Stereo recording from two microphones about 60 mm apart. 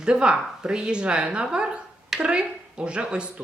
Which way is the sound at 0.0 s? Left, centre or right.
Centre.